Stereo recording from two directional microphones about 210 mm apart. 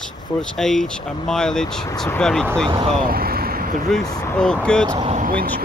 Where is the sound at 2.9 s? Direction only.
45° right (ahead or behind).